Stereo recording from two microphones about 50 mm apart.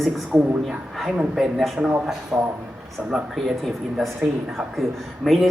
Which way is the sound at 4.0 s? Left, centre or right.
Centre.